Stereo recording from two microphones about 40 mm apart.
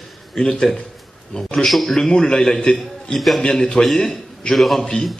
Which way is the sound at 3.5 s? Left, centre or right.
Left.